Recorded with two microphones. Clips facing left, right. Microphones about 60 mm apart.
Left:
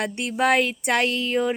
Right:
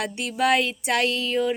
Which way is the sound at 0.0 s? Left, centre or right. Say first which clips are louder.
Left 1 dB; left.